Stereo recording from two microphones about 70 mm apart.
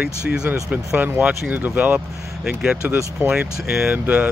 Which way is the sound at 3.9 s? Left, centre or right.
Right.